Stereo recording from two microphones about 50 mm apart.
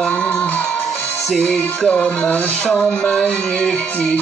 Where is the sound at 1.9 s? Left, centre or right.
Left.